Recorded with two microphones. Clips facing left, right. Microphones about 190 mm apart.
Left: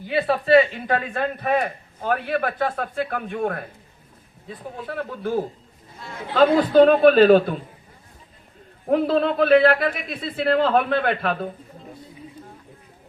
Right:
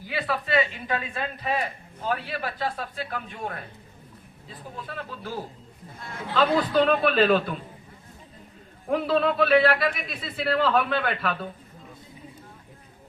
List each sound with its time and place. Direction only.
0.1 s a woman's voice: 30° left (ahead or behind)
0.9 s a man's voice: 50° left (ahead or behind)
8.9 s speech: 45° left (ahead or behind)